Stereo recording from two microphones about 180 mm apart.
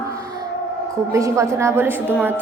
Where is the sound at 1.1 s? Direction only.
15° right (ahead or behind).